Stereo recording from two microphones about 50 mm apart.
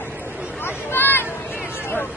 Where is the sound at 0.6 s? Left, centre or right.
Left.